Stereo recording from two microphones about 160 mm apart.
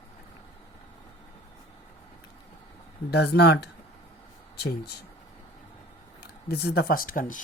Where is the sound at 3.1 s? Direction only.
90° left.